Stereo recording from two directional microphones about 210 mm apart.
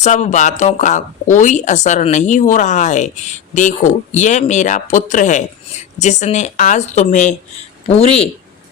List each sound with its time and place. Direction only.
0.0 s a man's voice: 35° left (ahead or behind)